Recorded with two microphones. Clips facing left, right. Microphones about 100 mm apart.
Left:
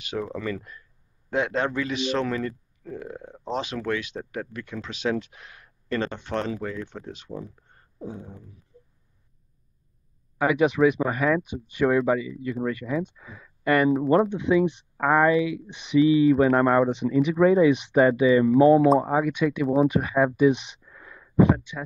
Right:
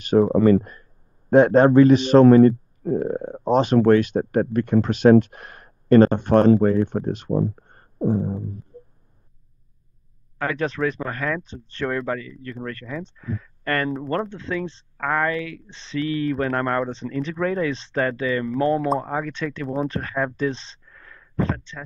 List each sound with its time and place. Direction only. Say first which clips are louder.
0.0 s a man's voice: right 14 dB; 40° right (ahead or behind)
8.7 s a sound: right 11 dB; 50° right (ahead or behind)
10.4 s speech: left 4 dB; 10° left (ahead or behind)